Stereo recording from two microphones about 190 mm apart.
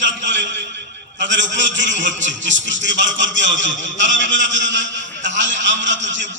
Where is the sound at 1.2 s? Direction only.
70° right (ahead or behind).